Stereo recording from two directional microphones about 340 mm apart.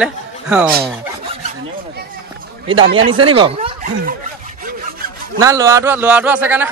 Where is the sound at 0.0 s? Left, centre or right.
Centre.